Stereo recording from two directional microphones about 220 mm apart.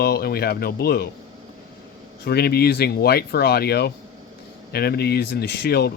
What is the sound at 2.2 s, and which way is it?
Speech, 45° left (ahead or behind).